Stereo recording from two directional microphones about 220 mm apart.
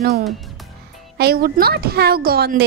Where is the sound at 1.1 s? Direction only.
45° right (ahead or behind).